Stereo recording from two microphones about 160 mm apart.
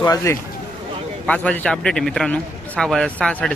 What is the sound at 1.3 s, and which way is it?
A man's voice, 10° left (ahead or behind).